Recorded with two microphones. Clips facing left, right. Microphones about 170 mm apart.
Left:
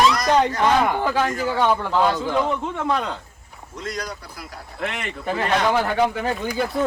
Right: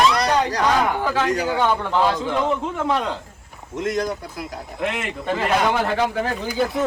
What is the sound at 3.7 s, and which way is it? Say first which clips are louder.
Speech: right 7 dB; 20° right (ahead or behind).